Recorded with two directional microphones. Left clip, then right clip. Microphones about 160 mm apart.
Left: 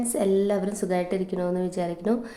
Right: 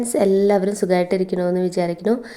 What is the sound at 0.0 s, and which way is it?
A woman's voice, 35° right (ahead or behind).